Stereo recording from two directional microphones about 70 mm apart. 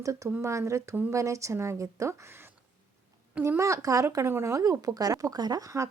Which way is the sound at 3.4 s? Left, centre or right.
Right.